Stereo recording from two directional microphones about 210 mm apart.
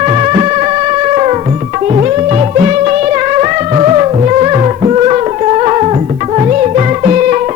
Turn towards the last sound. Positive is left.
turn(degrees=-35)  # may be behind; listen again after turning